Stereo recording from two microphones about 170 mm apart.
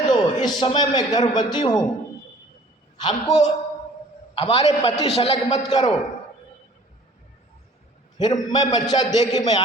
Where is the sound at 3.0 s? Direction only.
25° left (ahead or behind).